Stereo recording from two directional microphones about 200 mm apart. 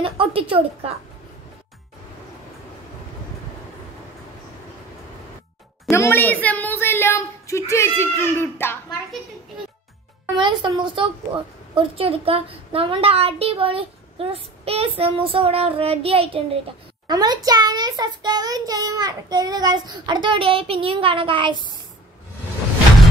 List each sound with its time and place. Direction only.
0.0 s a woman's voice: 25° right (ahead or behind)
5.9 s speech: 15° left (ahead or behind)
10.3 s a woman's voice: 25° right (ahead or behind)